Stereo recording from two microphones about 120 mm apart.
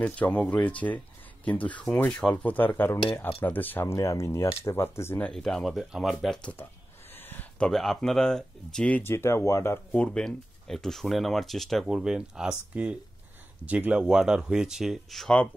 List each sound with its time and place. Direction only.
0.0 s speech: 10° left (ahead or behind)
5.2 s speech: 5° left (ahead or behind)
7.2 s speech: 15° left (ahead or behind)
10.0 s speech: 5° left (ahead or behind)